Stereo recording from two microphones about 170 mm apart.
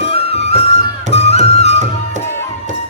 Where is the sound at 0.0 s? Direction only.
35° left (ahead or behind).